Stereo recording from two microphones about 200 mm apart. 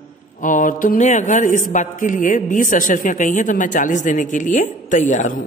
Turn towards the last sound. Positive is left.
turn(degrees=40)  # may be behind; listen again after turning